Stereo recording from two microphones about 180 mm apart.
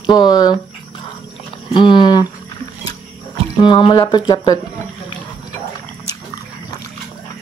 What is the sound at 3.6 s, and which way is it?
Speech, 25° left (ahead or behind).